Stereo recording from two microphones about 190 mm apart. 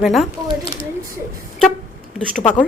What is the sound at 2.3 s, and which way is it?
Speech, 40° left (ahead or behind).